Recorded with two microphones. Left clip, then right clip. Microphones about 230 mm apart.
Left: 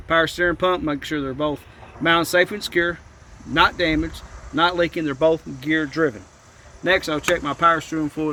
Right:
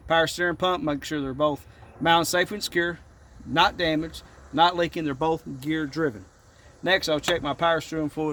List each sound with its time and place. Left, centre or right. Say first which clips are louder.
0.1 s speech: left 4 dB; right